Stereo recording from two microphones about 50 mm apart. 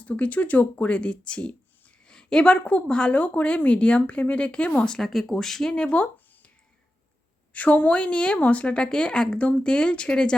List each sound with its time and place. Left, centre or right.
0.0 s a woman's voice: left
4.9 s speech: centre
5.7 s a sound: left
7.5 s speech: left